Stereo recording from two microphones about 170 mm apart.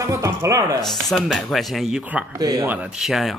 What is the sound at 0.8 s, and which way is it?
Speech, centre (ahead or behind).